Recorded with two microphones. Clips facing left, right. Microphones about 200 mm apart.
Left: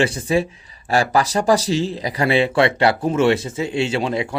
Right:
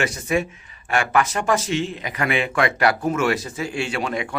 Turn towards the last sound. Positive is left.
turn(degrees=25)  # may be behind; listen again after turning